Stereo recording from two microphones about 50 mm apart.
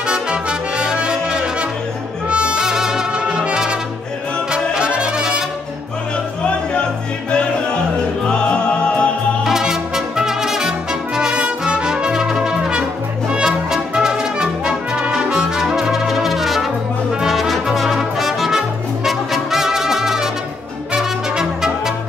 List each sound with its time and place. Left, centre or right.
0.0 s brass instrument: centre
4.5 s music: centre
8.3 s music: centre
9.4 s brass instrument: centre
20.9 s music: centre